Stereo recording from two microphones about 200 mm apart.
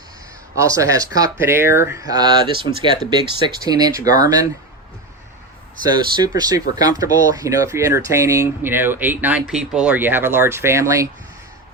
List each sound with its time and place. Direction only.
0.5 s speech: 15° right (ahead or behind)
5.8 s speech: 20° right (ahead or behind)